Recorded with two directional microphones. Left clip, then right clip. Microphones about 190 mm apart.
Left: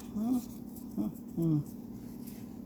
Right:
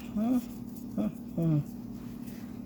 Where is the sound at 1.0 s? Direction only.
45° right (ahead or behind).